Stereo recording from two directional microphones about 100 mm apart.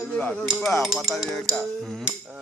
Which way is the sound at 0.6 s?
Centre (ahead or behind).